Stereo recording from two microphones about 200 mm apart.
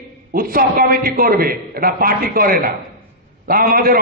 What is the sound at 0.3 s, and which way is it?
A man's voice, 45° right (ahead or behind).